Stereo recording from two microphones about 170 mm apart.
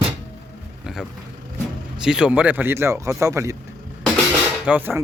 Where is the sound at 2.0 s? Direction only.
5° right (ahead or behind).